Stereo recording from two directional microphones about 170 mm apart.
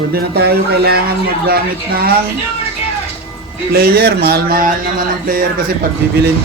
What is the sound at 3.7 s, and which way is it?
Speech, 65° right (ahead or behind).